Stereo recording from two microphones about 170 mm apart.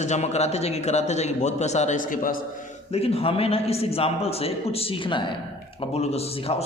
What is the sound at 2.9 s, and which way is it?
A man's voice, 35° left (ahead or behind).